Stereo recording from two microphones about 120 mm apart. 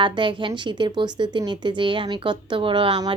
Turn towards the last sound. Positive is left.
turn(degrees=-45)  # may be behind; listen again after turning